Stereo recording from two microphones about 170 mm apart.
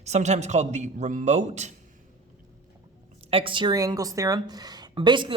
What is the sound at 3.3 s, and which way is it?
A woman's voice, 30° right (ahead or behind).